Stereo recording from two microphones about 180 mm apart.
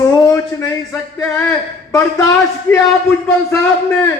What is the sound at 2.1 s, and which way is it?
Speech, 15° left (ahead or behind).